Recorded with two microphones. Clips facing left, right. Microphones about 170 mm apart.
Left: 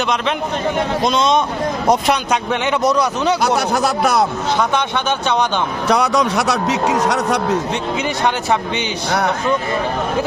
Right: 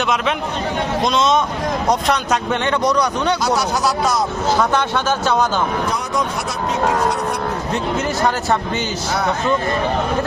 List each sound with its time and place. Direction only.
1.0 s a man's voice: centre (ahead or behind)
3.4 s speech: 60° left (ahead or behind)
5.9 s a man's voice: 75° left (ahead or behind)